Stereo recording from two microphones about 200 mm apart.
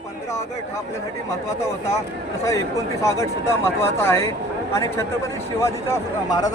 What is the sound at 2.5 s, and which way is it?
Speech, 15° left (ahead or behind).